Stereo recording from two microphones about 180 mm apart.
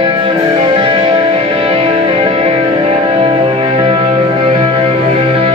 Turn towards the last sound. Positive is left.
turn(degrees=-30)  # may be behind; listen again after turning